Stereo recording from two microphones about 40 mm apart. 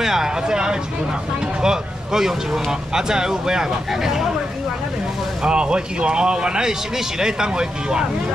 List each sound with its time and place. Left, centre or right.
0.0 s speech: centre
5.4 s speech: right